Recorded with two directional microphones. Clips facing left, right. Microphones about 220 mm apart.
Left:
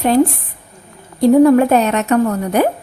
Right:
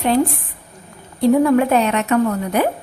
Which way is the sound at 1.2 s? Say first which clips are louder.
Left 5 dB; 40° left (ahead or behind).